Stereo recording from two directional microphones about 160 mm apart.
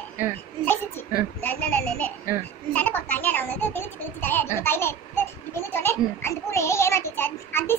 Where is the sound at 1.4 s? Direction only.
10° left (ahead or behind).